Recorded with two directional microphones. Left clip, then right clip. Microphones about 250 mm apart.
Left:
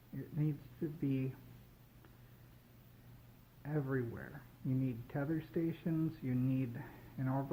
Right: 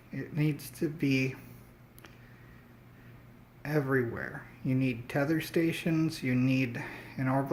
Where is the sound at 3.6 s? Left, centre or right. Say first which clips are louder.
Right 10 dB; right.